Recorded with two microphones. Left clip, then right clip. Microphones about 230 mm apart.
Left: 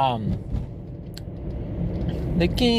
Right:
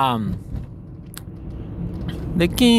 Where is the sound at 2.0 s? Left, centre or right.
Right.